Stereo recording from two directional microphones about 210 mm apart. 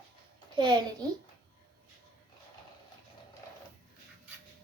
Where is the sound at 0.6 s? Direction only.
20° right (ahead or behind).